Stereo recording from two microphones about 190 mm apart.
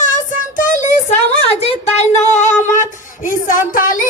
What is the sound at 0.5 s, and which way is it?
Child singing, 40° left (ahead or behind).